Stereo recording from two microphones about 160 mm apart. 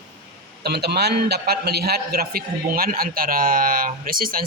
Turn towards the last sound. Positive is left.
turn(degrees=-65)  # may be behind; listen again after turning